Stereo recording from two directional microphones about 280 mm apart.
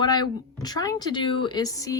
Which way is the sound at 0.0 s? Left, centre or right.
Centre.